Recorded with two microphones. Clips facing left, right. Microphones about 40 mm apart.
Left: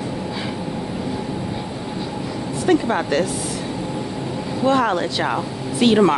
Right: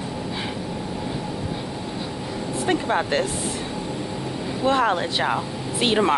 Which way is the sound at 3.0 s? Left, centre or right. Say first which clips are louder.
Left 3 dB; right.